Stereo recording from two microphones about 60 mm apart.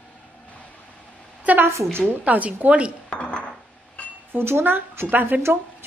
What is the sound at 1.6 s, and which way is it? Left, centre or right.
Speech, right.